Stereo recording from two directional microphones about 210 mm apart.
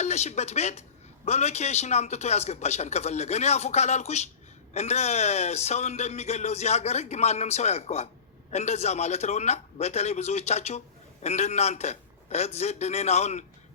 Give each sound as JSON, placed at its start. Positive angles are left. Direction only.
{"t": 0.0, "sound": "speech", "side_deg": 30}